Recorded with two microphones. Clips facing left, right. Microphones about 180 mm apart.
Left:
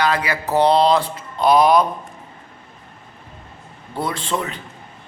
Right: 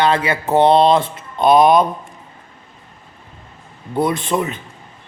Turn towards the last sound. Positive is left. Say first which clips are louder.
# right 5 dB
turn(degrees=-20)  # may be behind; listen again after turning